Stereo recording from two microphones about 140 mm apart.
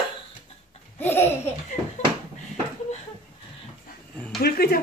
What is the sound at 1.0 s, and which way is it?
Laughter, 15° left (ahead or behind).